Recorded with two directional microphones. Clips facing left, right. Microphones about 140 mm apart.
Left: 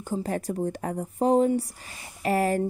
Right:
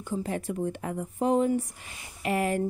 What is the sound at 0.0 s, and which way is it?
Speech, 40° left (ahead or behind).